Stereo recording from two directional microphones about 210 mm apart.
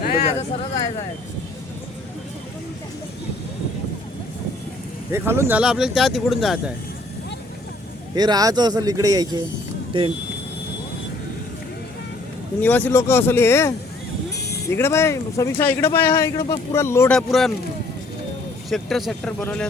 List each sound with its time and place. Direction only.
0.0 s a sound: 45° left (ahead or behind)
5.1 s speech: 10° right (ahead or behind)
8.1 s a man's voice: 20° right (ahead or behind)
12.6 s speech: 10° left (ahead or behind)
17.2 s speech: centre (ahead or behind)
18.7 s speech: centre (ahead or behind)